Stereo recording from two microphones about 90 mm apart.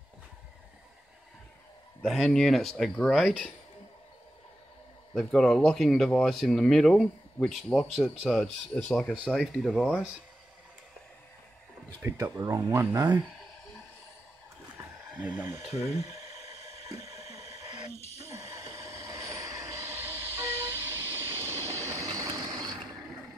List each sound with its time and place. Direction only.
2.0 s speech: centre (ahead or behind)
5.1 s speech: 10° left (ahead or behind)
8.3 s speech: 10° left (ahead or behind); by 9.9 s 5° right (ahead or behind)
12.2 s speech: 40° right (ahead or behind)
12.9 s speech: 50° right (ahead or behind)
15.1 s speech: 20° right (ahead or behind)
16.0 s a sound: 35° right (ahead or behind)
18.3 s train: 35° right (ahead or behind)
21.8 s vehicle: 35° right (ahead or behind)